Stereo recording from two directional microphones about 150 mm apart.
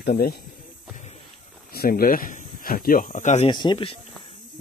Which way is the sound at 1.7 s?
85° left.